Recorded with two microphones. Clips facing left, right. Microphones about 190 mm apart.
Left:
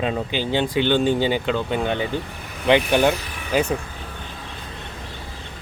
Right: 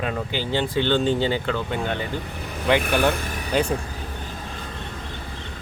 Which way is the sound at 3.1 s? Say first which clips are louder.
Right 3 dB; 45° right (ahead or behind).